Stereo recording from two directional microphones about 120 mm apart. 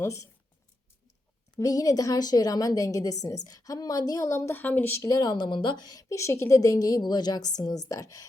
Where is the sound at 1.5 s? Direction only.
30° left (ahead or behind).